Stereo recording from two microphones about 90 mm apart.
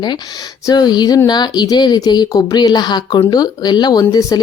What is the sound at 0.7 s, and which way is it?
Speech, 50° left (ahead or behind).